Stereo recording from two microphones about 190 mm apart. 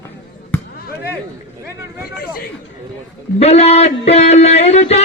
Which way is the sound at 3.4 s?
35° left (ahead or behind).